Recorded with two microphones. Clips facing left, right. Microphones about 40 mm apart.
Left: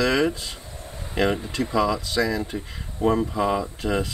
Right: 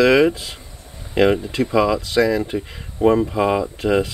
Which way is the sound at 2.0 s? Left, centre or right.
Right.